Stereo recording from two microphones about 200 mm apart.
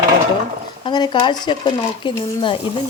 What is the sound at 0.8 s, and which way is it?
A woman's voice, 25° left (ahead or behind).